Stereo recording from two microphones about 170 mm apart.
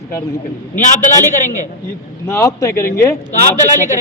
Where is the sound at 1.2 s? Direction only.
50° left (ahead or behind).